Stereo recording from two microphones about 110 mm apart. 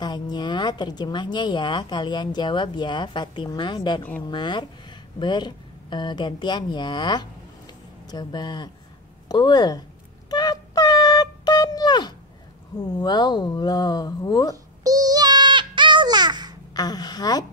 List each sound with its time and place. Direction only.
0.0 s a woman's voice: 40° left (ahead or behind)
10.3 s a sound: 40° left (ahead or behind)
12.7 s speech: 40° left (ahead or behind)
14.8 s bleat: 35° right (ahead or behind)
16.7 s speech: 40° left (ahead or behind)